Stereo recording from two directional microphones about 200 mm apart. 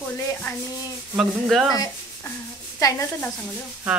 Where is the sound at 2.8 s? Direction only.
15° left (ahead or behind).